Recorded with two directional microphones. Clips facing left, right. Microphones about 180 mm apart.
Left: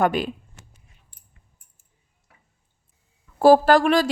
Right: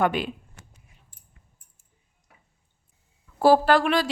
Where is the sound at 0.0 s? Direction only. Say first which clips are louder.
Left 3 dB; 40° left (ahead or behind).